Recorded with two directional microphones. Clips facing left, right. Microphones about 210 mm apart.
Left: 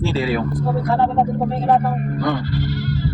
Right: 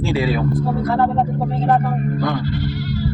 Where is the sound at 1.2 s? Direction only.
15° left (ahead or behind).